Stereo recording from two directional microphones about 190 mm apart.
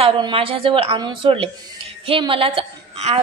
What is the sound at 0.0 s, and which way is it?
A woman's voice, 25° right (ahead or behind).